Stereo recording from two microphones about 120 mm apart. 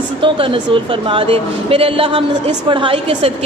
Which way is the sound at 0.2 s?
45° right (ahead or behind).